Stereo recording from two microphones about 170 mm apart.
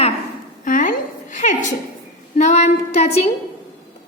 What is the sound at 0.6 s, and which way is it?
A woman's voice, 50° left (ahead or behind).